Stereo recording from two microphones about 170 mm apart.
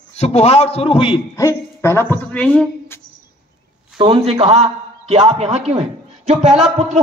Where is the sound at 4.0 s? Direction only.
35° right (ahead or behind).